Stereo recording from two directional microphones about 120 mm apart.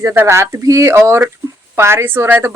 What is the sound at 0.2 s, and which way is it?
A woman's voice, 20° right (ahead or behind).